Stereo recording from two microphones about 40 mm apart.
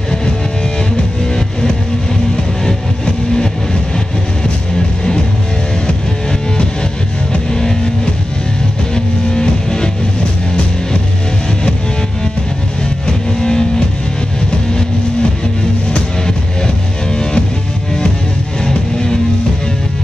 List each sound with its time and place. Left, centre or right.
8.9 s music: centre
13.4 s vehicle: centre
15.9 s music: centre
18.6 s music: centre